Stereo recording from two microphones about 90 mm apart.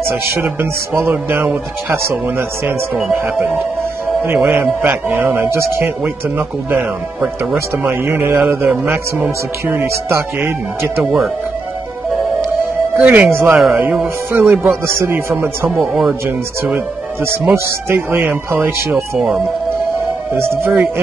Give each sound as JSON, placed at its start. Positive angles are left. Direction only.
{"t": 0.4, "sound": "speech", "side_deg": -25}
{"t": 6.0, "sound": "speech", "side_deg": -20}
{"t": 7.8, "sound": "speech", "side_deg": -25}
{"t": 12.9, "sound": "speech", "side_deg": -15}
{"t": 15.7, "sound": "speech", "side_deg": -5}
{"t": 16.1, "sound": "speech", "side_deg": -20}
{"t": 18.9, "sound": "speech", "side_deg": -5}
{"t": 20.3, "sound": "speech", "side_deg": -25}